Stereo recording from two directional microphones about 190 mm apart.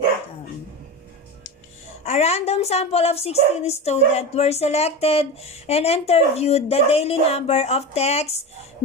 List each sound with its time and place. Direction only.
2.0 s a woman's voice: 35° left (ahead or behind)